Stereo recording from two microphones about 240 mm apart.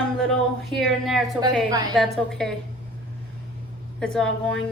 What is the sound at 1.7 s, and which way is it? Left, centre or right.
Speech, centre.